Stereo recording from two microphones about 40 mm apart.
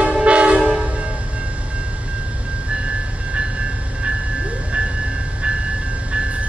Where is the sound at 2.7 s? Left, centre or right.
Right.